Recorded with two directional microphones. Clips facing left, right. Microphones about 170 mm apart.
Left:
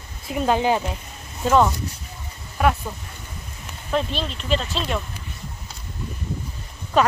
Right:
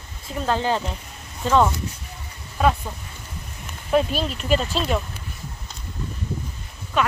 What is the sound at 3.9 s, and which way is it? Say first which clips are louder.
Speech: right 4 dB; 10° right (ahead or behind).